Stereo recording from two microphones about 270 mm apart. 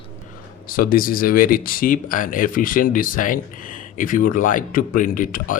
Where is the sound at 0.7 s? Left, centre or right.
Left.